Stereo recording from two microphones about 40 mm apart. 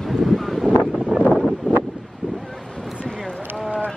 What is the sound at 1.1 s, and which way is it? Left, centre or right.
Wind noise, right.